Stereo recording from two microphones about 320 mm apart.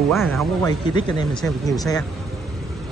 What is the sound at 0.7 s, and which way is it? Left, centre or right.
Speech, centre.